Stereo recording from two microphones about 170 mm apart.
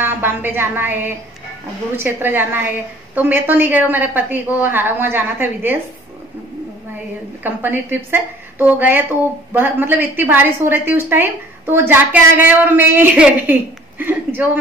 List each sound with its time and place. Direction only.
0.0 s a woman's voice: 10° right (ahead or behind)
7.4 s a woman's voice: 10° right (ahead or behind)